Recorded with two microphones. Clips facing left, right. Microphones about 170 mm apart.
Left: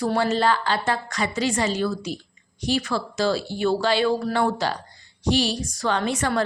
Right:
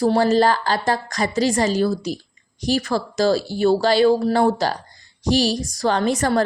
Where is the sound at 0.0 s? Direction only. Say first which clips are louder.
Right 5 dB; 35° right (ahead or behind).